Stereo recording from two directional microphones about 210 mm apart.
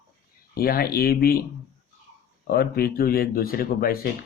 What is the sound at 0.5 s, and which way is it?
Speech, 45° left (ahead or behind).